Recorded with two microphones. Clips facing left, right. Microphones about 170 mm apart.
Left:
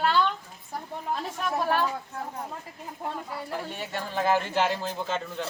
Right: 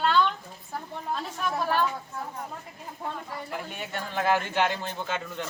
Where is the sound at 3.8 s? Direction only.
30° left (ahead or behind).